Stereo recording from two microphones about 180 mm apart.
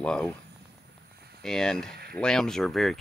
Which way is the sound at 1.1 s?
60° right (ahead or behind).